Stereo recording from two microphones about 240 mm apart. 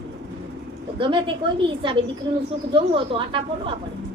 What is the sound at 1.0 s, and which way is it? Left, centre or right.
Speech, right.